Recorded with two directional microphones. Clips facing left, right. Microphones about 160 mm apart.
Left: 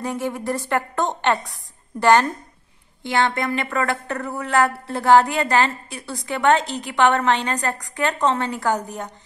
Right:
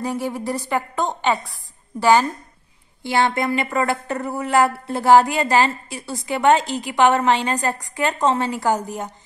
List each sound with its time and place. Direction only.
0.0 s a woman's voice: 5° right (ahead or behind)